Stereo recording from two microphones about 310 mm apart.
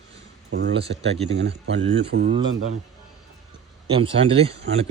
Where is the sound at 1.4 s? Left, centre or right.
Right.